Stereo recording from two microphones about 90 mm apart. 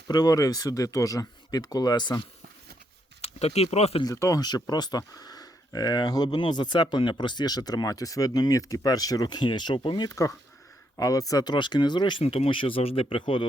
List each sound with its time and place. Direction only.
0.1 s speech: 45° left (ahead or behind)
3.2 s speech: 90° left
4.0 s speech: 35° left (ahead or behind)
6.3 s speech: 60° left (ahead or behind)